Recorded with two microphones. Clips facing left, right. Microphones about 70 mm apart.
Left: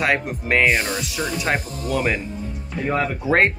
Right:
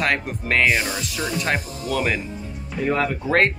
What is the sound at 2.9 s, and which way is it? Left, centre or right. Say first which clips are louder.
Speech: left 1 dB; centre.